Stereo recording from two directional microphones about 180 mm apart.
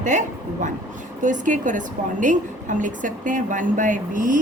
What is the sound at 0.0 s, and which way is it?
A man's voice, 40° right (ahead or behind).